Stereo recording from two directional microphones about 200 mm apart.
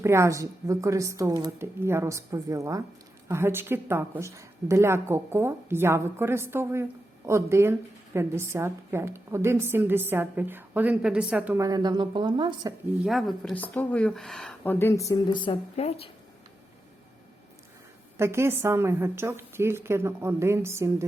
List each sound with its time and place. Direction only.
0.0 s a woman's voice: 15° right (ahead or behind)
13.1 s speech: centre (ahead or behind); by 16.0 s 30° left (ahead or behind)
18.2 s a woman's voice: 15° right (ahead or behind)